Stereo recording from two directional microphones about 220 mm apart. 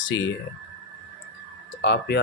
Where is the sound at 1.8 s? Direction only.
50° left (ahead or behind).